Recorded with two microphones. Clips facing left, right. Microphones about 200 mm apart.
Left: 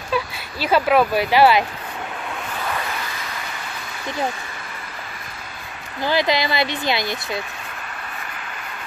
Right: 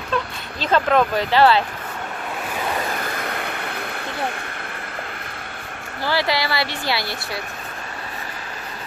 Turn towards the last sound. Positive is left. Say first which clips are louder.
# left 2 dB
turn(degrees=20)  # may be behind; listen again after turning